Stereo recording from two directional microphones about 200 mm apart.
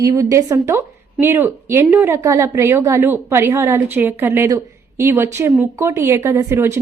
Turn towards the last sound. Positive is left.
turn(degrees=-10)  # may be behind; listen again after turning